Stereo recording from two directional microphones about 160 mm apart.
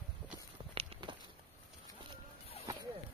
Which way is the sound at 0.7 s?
30° right (ahead or behind).